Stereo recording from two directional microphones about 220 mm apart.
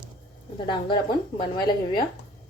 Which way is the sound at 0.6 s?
20° left (ahead or behind).